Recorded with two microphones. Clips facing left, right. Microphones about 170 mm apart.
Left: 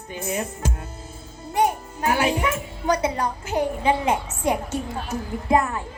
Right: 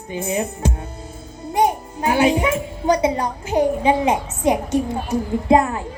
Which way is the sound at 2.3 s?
15° right (ahead or behind).